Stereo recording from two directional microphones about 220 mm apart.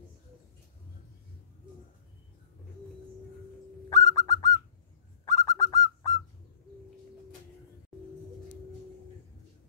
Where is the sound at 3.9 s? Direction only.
15° left (ahead or behind).